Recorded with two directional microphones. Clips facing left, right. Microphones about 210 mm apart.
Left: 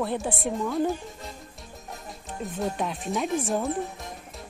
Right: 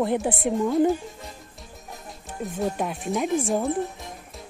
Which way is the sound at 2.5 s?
5° right (ahead or behind).